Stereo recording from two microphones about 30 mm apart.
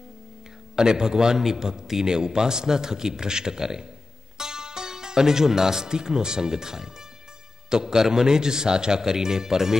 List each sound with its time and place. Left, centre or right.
0.7 s a man's voice: right